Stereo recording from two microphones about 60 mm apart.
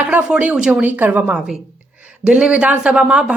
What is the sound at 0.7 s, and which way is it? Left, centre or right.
Speech, right.